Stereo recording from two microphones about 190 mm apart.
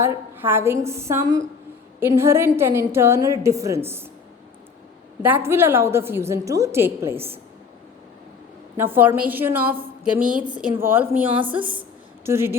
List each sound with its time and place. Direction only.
0.0 s a woman's voice: 15° right (ahead or behind)
5.2 s a woman's voice: 10° right (ahead or behind)
8.8 s a woman's voice: 10° right (ahead or behind)
10.2 s a woman's voice: 45° right (ahead or behind)
10.6 s a woman's voice: 10° right (ahead or behind)